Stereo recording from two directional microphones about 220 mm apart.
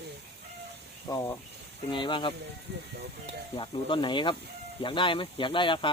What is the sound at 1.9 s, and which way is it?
Speech, 20° left (ahead or behind).